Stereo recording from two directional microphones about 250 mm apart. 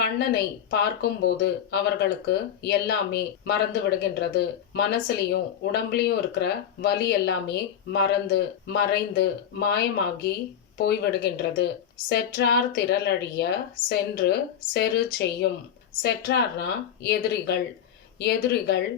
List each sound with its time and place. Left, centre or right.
0.0 s speech: left